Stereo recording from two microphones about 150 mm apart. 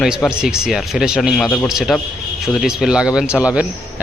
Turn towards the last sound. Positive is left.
turn(degrees=-5)  # may be behind; listen again after turning